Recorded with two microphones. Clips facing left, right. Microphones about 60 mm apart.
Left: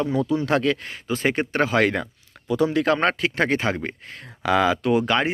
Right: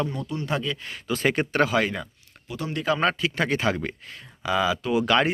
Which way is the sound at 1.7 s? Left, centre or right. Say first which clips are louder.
Left 4 dB; left.